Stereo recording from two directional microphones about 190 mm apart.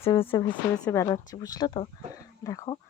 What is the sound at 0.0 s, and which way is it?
Speech, 30° left (ahead or behind).